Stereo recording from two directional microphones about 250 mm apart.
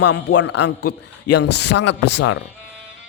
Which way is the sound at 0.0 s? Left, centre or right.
Left.